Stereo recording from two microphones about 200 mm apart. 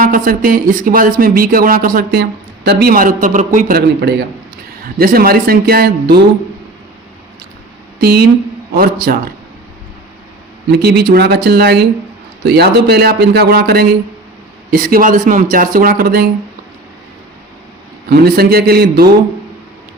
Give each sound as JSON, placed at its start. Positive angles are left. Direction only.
{"t": 0.0, "sound": "speech", "side_deg": -45}
{"t": 8.0, "sound": "speech", "side_deg": -50}
{"t": 10.7, "sound": "speech", "side_deg": -55}
{"t": 18.1, "sound": "speech", "side_deg": -50}